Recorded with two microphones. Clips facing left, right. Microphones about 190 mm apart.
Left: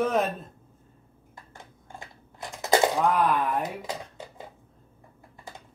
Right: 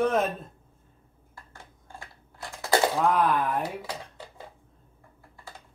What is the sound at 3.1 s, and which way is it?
Speech, centre (ahead or behind).